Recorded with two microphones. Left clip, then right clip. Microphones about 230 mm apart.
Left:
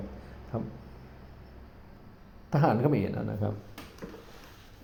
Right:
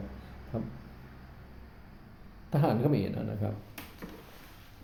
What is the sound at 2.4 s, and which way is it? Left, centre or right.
A man's voice, centre.